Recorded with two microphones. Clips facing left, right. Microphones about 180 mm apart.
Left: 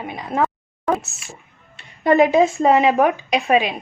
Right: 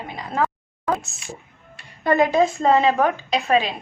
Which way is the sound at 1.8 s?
25° left (ahead or behind).